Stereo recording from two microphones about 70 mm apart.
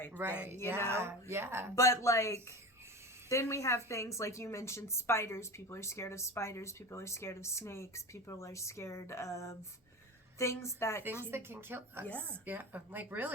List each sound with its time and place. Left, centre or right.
0.2 s speech: right
1.7 s a woman's voice: left
11.3 s speech: right
12.0 s speech: centre
12.5 s speech: right